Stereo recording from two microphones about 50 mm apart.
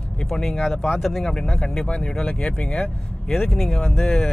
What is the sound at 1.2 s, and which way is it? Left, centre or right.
Speech, centre.